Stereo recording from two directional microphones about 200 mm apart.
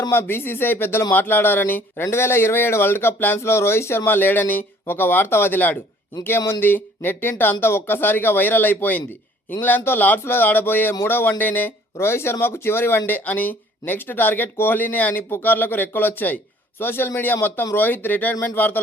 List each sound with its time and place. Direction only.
0.0 s a man's voice: 10° left (ahead or behind)